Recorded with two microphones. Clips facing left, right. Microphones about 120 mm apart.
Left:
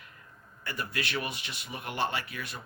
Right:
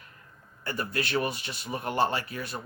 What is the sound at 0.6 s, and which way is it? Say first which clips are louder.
Speech: right 4 dB; 35° right (ahead or behind).